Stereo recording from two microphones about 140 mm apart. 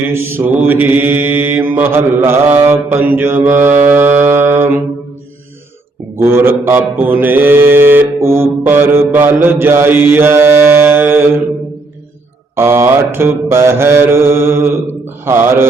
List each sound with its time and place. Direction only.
0.0 s mantra: 15° right (ahead or behind)
3.8 s music: 15° right (ahead or behind)
6.1 s mantra: 15° right (ahead or behind)
12.5 s mantra: 15° right (ahead or behind)